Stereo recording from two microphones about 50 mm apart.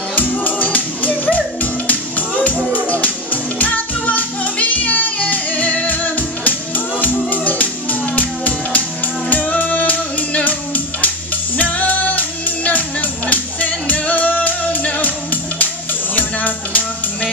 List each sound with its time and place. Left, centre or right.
0.1 s music: left
16.2 s music: left